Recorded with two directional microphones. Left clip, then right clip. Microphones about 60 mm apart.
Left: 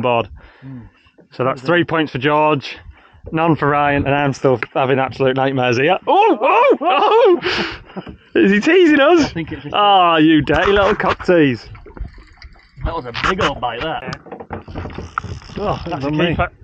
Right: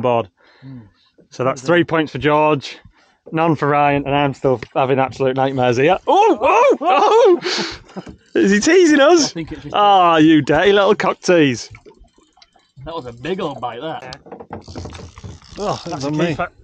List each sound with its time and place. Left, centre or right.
0.0 s speech: centre
1.3 s speech: right
4.1 s speech: left
4.7 s speech: centre
5.9 s speech: centre
7.9 s speech: right
9.4 s speech: centre
9.8 s speech: right
13.3 s speech: centre
14.3 s a sound: right
15.6 s speech: right